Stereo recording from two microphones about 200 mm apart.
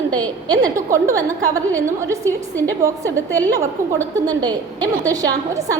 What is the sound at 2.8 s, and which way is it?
A woman's voice, 15° right (ahead or behind).